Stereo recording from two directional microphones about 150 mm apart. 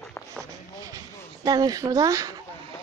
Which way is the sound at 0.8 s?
25° right (ahead or behind).